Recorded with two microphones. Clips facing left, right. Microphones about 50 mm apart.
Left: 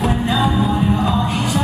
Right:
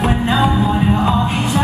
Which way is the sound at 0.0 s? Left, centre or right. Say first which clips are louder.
Right 2 dB; right.